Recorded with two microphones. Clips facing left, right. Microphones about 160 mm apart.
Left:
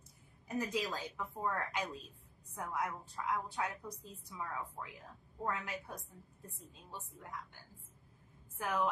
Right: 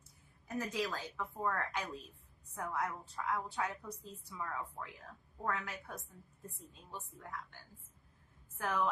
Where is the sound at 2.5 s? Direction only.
10° left (ahead or behind).